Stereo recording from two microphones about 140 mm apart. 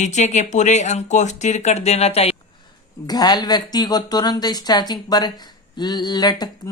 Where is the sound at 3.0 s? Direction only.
30° left (ahead or behind).